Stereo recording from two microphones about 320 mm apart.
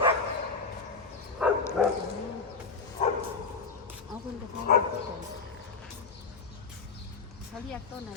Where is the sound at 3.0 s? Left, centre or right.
Left.